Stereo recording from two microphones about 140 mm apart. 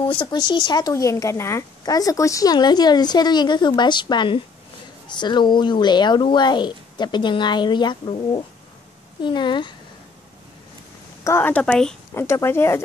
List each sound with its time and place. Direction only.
0.0 s speech: 40° left (ahead or behind)
11.2 s a woman's voice: 15° left (ahead or behind)
12.1 s speech: 20° left (ahead or behind)